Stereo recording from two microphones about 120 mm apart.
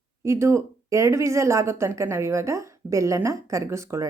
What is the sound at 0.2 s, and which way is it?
Speech, 25° right (ahead or behind).